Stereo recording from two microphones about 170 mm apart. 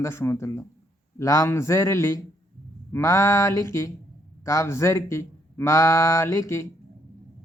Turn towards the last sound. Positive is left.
turn(degrees=15)  # may be behind; listen again after turning